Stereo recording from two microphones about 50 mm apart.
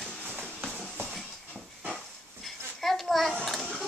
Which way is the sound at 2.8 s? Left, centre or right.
Centre.